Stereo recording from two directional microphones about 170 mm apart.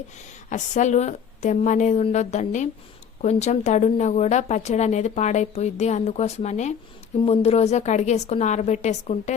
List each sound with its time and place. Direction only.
0.5 s a woman's voice: 45° left (ahead or behind)